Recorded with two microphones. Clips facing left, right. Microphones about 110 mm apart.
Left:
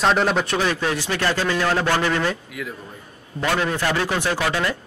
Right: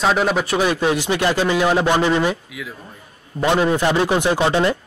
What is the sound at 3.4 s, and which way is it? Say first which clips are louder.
A man's voice: right 5 dB; 20° right (ahead or behind).